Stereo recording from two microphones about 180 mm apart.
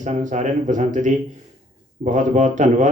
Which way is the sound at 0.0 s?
40° right (ahead or behind).